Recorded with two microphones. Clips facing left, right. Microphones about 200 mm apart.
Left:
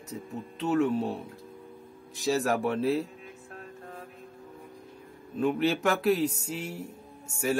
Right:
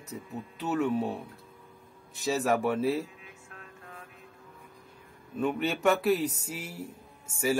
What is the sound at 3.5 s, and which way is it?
Music, 35° left (ahead or behind).